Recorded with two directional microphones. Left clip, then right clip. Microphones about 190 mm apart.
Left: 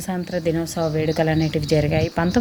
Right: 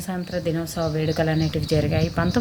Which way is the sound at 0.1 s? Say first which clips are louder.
Left 3 dB; 20° left (ahead or behind).